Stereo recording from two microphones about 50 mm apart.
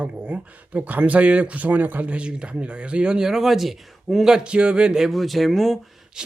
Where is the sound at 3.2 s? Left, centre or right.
Centre.